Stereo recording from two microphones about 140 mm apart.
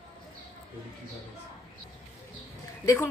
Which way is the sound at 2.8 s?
20° left (ahead or behind).